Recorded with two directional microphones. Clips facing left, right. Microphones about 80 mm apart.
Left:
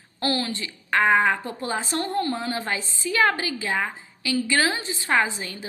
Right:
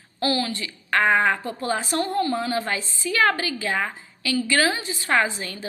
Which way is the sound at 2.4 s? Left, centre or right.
Left.